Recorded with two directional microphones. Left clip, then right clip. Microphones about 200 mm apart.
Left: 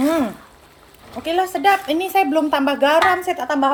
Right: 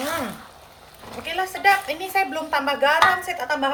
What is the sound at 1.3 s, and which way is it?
A woman's voice, 35° left (ahead or behind).